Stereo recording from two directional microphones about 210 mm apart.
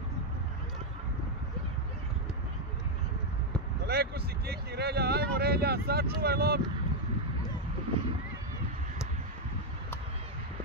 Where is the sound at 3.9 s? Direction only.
50° right (ahead or behind).